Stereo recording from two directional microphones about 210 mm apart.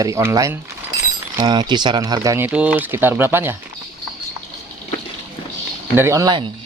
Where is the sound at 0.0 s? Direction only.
10° right (ahead or behind).